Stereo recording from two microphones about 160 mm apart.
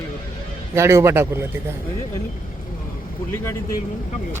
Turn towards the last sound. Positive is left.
turn(degrees=15)  # may be behind; listen again after turning